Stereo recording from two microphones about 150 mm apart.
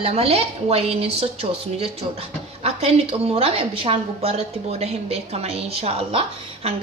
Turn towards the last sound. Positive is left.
turn(degrees=-40)  # may be behind; listen again after turning